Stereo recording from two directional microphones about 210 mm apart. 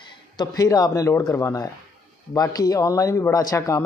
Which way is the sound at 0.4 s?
15° left (ahead or behind).